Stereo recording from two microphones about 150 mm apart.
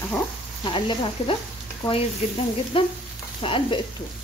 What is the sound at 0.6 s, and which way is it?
Speech, 35° left (ahead or behind).